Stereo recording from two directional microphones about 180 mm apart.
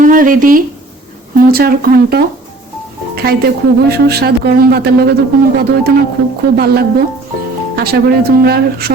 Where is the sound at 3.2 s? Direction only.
60° right (ahead or behind).